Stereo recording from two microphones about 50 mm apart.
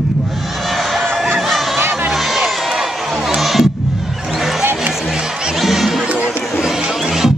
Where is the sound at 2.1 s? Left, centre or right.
Centre.